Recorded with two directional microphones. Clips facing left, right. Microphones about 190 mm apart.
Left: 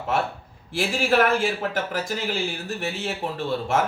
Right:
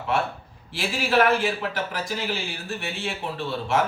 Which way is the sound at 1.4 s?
50° left (ahead or behind).